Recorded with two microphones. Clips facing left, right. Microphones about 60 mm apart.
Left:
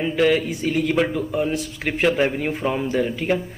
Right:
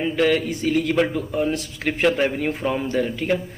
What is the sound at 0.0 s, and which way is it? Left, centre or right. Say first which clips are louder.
Speech: left 1 dB; centre.